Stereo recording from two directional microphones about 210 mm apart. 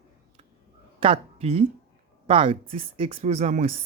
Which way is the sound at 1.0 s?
25° right (ahead or behind).